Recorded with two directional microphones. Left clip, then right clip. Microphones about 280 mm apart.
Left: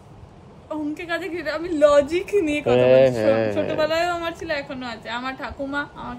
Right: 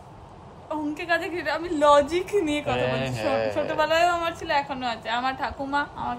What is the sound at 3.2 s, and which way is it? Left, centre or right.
Speech, left.